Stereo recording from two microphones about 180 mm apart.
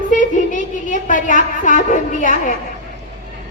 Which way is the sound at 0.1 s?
45° left (ahead or behind).